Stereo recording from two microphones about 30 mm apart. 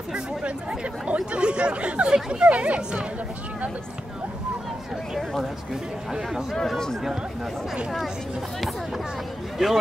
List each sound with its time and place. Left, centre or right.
0.4 s speech: right
2.2 s speech: right
2.5 s speech: right
9.6 s speech: centre